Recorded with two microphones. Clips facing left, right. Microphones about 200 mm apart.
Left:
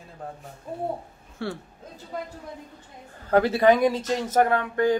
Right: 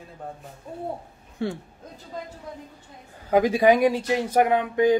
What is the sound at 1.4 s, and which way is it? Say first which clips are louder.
Speech: right 3 dB; 15° right (ahead or behind).